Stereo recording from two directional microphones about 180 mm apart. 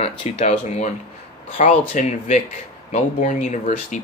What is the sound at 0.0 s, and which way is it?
Speech, 35° left (ahead or behind).